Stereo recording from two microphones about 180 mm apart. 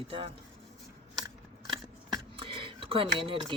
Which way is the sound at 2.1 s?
30° right (ahead or behind).